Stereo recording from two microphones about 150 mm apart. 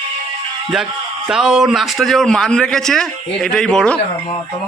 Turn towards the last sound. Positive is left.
turn(degrees=5)  # may be behind; listen again after turning